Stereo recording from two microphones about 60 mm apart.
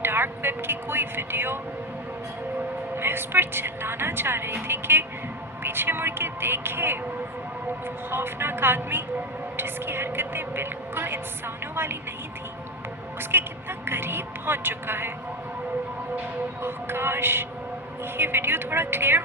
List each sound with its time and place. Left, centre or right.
0.0 s a sound: right
2.9 s a woman's voice: right
8.1 s a woman's voice: right
13.3 s a woman's voice: right
16.6 s a woman's voice: right